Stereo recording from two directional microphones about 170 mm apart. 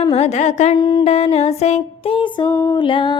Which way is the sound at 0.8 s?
25° left (ahead or behind).